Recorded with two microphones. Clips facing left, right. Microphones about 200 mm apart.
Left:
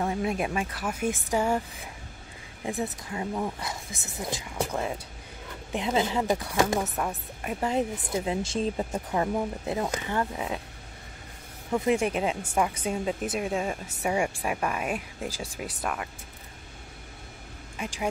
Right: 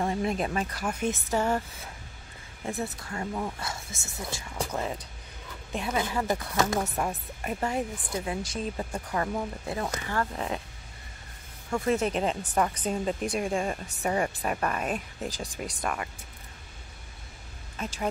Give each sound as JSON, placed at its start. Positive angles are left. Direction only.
{"t": 0.0, "sound": "speech", "side_deg": 5}
{"t": 4.6, "sound": "speech", "side_deg": 5}
{"t": 5.7, "sound": "speech", "side_deg": 15}
{"t": 11.7, "sound": "speech", "side_deg": 15}
{"t": 17.7, "sound": "speech", "side_deg": 15}